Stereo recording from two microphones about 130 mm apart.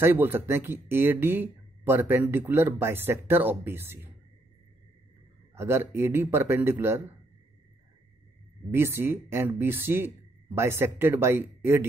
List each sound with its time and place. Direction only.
0.0 s speech: 15° right (ahead or behind)
5.5 s speech: 20° right (ahead or behind)
8.6 s speech: 20° right (ahead or behind)